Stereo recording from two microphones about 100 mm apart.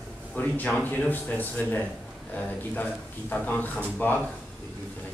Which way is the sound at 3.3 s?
15° left (ahead or behind).